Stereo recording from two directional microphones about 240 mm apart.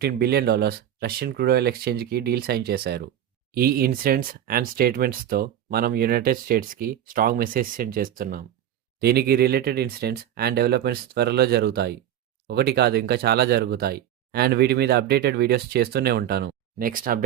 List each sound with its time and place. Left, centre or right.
0.0 s speech: right